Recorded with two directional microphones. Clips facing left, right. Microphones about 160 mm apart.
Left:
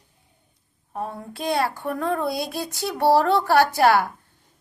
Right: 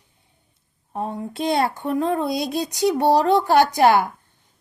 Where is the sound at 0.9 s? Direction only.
20° right (ahead or behind).